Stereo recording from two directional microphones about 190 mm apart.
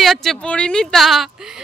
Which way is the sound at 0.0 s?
Centre (ahead or behind).